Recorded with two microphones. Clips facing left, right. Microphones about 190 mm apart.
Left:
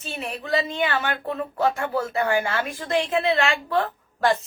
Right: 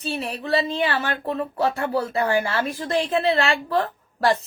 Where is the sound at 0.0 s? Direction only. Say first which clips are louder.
Right 4 dB; 35° right (ahead or behind).